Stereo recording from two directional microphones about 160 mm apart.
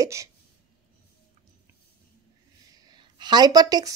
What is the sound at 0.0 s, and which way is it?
Hiccup, 20° right (ahead or behind).